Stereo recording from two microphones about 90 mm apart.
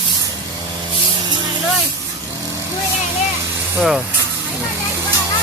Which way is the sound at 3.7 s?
5° right (ahead or behind).